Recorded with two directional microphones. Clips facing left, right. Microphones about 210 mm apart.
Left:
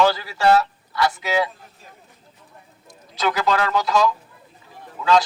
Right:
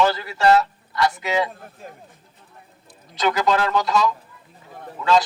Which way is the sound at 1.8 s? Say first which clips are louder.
Right 10 dB; 50° right (ahead or behind).